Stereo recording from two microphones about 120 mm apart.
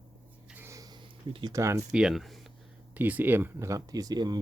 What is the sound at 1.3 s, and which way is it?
Speech, 40° right (ahead or behind).